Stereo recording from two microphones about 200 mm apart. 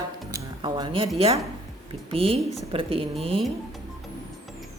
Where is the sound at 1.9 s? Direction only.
30° right (ahead or behind).